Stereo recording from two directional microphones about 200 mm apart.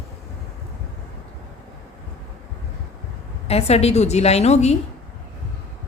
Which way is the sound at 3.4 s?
30° left (ahead or behind).